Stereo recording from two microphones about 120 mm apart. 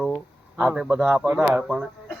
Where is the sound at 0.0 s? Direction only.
Centre (ahead or behind).